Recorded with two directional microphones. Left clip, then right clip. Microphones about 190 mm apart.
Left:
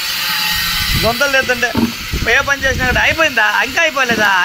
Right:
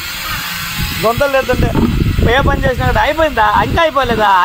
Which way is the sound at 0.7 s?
15° right (ahead or behind).